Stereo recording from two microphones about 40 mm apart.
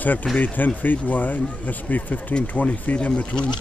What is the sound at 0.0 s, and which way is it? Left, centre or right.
Speech, left.